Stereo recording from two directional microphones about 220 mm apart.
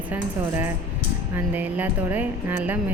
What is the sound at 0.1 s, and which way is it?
A woman's voice, 10° right (ahead or behind).